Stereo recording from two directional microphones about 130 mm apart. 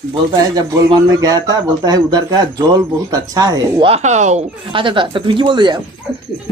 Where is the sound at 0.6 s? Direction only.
30° right (ahead or behind).